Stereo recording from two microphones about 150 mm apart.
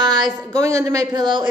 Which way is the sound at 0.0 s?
30° right (ahead or behind).